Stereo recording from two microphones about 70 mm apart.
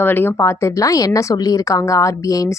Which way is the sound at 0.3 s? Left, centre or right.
Left.